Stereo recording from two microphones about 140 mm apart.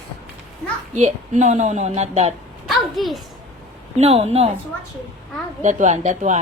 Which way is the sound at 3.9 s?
50° right (ahead or behind).